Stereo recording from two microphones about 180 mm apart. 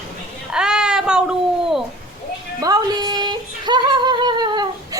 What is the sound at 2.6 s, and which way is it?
Yodeling, 20° right (ahead or behind).